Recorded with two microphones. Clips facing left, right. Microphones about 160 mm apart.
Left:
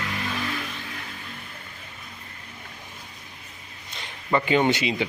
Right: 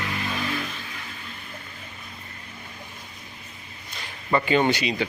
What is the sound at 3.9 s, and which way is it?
Speech, 20° left (ahead or behind).